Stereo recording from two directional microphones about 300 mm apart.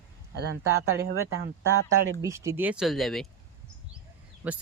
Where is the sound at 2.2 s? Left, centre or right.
Centre.